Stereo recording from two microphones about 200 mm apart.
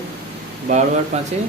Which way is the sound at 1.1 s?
35° right (ahead or behind).